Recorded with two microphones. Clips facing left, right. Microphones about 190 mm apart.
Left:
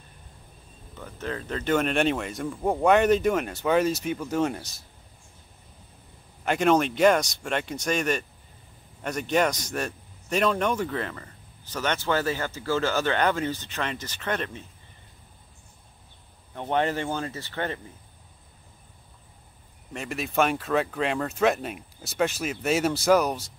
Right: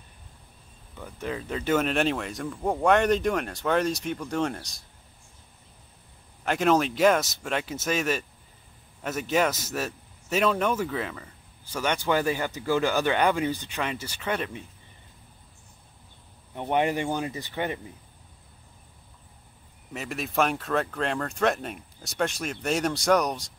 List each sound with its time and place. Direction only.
0.9 s a man's voice: 10° right (ahead or behind)
6.4 s a man's voice: centre (ahead or behind)
16.5 s a man's voice: 15° right (ahead or behind)
19.9 s speech: centre (ahead or behind)